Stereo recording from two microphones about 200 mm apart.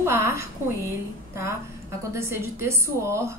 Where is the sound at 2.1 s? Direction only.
15° right (ahead or behind).